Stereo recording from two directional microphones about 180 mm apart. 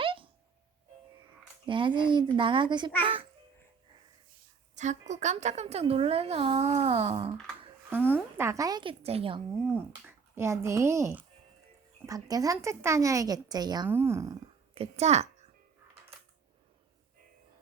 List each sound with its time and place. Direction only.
0.0 s music: 30° right (ahead or behind)
1.6 s speech: 25° right (ahead or behind)
4.7 s a woman's voice: 40° right (ahead or behind)
7.9 s speech: 10° right (ahead or behind); by 9.4 s 30° right (ahead or behind)
9.7 s speech: 15° right (ahead or behind)
14.8 s speech: 35° right (ahead or behind)